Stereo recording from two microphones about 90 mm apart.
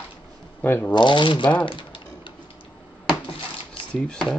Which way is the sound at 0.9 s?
60° left (ahead or behind).